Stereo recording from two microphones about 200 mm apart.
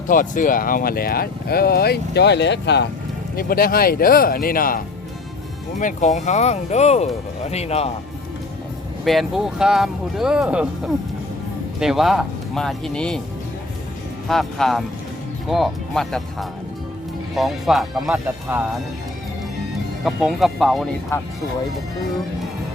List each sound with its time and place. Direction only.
0.1 s speech: 40° left (ahead or behind); by 2.8 s 60° left (ahead or behind)
3.3 s speech: 45° left (ahead or behind)
5.8 s speech: 35° left (ahead or behind)
9.0 s speech: centre (ahead or behind)
11.8 s speech: centre (ahead or behind)
14.3 s speech: centre (ahead or behind)
20.1 s speech: centre (ahead or behind)